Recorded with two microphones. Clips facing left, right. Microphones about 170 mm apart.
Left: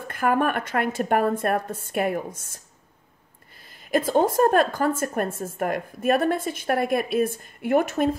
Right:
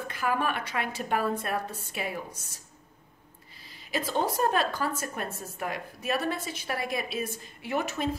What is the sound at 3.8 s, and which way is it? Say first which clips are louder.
A woman's voice: left 8 dB; 50° left (ahead or behind).